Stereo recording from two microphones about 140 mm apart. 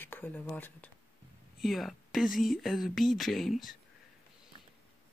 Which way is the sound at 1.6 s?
Centre (ahead or behind).